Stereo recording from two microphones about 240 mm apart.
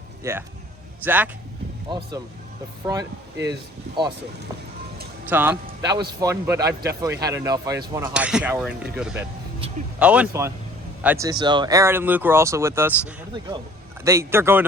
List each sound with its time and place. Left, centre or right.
0.2 s a man's voice: centre
1.9 s a man's voice: centre
5.3 s a man's voice: centre